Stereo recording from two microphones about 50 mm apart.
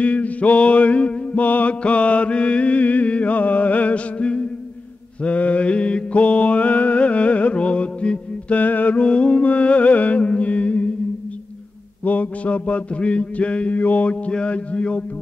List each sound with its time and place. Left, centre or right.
0.0 s mantra: left
12.0 s mantra: left